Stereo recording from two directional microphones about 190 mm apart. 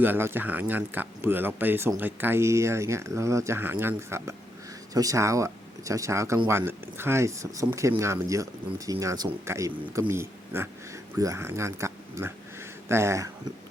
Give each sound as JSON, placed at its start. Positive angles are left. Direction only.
{"t": 0.0, "sound": "speech", "side_deg": -10}